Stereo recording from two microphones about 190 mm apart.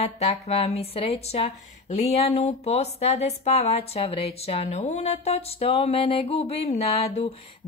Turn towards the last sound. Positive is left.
turn(degrees=30)  # may be behind; listen again after turning